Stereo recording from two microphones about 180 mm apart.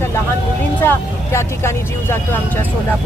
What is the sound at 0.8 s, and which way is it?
Speech, 15° left (ahead or behind).